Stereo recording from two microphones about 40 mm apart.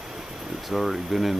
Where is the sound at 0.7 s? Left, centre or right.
Centre.